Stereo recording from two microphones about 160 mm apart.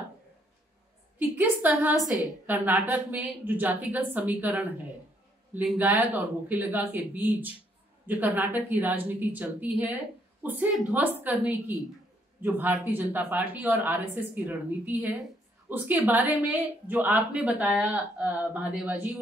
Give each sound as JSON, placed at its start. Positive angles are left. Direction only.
{"t": 1.6, "sound": "a woman's voice", "side_deg": -10}
{"t": 2.0, "sound": "a woman's voice", "side_deg": 20}
{"t": 2.4, "sound": "a woman's voice", "side_deg": -10}
{"t": 8.1, "sound": "a woman's voice", "side_deg": -10}